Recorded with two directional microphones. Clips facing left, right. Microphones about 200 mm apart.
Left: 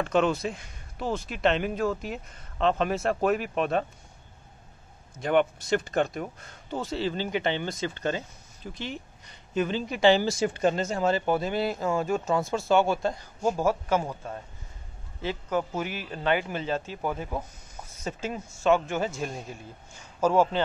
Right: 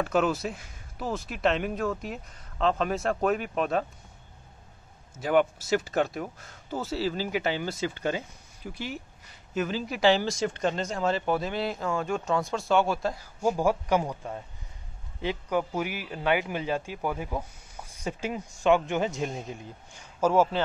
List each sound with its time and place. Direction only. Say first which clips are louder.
0.0 s speech: left 1 dB; 5° right (ahead or behind)
5.1 s a man's voice: even; 5° right (ahead or behind)